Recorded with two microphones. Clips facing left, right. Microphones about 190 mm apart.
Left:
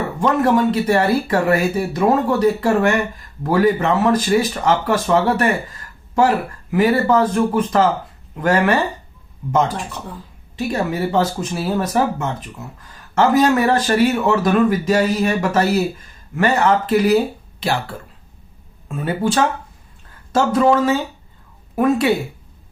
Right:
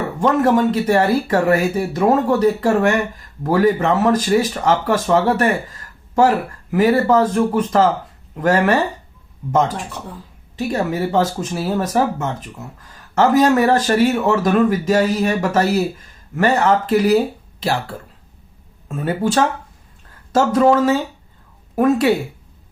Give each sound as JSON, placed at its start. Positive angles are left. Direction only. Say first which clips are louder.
{"t": 0.2, "sound": "speech", "louder": "right 1 dB", "side_deg": -45}
{"t": 6.7, "sound": "speech", "louder": "right 1 dB", "side_deg": -40}
{"t": 10.6, "sound": "speech", "louder": "right 1 dB", "side_deg": -40}